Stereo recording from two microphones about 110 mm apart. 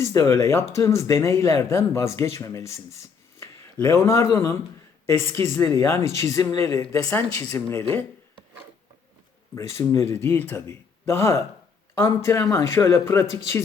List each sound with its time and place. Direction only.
0.0 s speech: 30° left (ahead or behind)
9.6 s speech: 25° left (ahead or behind)